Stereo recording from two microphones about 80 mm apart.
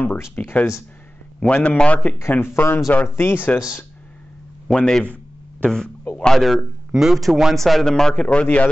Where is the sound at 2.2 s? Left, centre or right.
Left.